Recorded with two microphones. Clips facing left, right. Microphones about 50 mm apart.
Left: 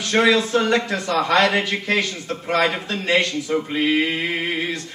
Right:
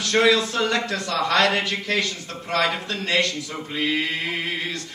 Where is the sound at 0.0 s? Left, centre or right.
Left.